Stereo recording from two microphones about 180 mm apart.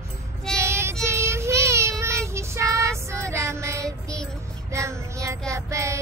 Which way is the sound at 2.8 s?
15° right (ahead or behind).